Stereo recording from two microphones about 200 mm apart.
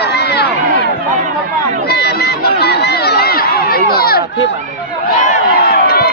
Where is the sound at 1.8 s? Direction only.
55° left (ahead or behind).